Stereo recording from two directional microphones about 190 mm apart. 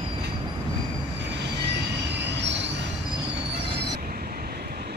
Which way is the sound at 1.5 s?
65° right (ahead or behind).